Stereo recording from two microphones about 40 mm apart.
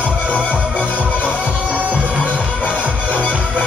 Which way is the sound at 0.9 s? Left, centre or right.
Right.